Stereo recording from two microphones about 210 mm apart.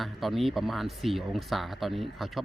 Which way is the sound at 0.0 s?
Centre (ahead or behind).